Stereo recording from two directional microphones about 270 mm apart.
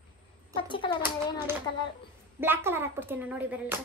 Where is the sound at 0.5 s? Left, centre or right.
Centre.